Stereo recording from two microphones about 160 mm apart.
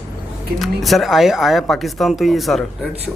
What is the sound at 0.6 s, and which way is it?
Speech, centre (ahead or behind).